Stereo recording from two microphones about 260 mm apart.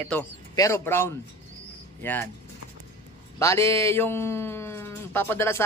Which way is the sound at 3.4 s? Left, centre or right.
Centre.